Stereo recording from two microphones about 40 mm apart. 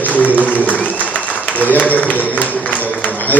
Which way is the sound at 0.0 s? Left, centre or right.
Left.